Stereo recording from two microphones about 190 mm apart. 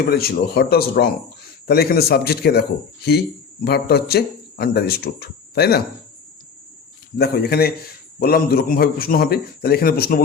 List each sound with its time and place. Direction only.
0.1 s speech: 55° left (ahead or behind)
7.2 s a man's voice: 55° left (ahead or behind)